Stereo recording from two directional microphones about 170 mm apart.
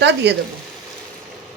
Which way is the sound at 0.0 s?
85° right.